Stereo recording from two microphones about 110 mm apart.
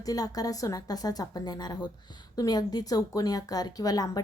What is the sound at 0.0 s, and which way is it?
Speech, 35° left (ahead or behind).